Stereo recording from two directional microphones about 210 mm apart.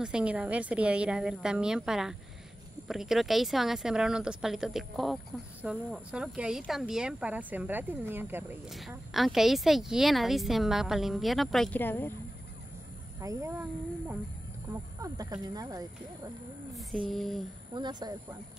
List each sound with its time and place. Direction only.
0.0 s speech: 5° right (ahead or behind)
13.2 s speech: 15° right (ahead or behind)
17.1 s speech: centre (ahead or behind)
17.7 s speech: 20° right (ahead or behind)